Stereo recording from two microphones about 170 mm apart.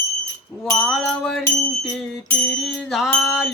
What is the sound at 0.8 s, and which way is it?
Music, centre (ahead or behind).